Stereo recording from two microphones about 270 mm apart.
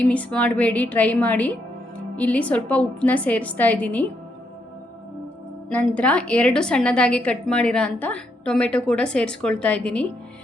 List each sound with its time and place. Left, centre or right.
0.0 s a woman's voice: centre
5.7 s a woman's voice: centre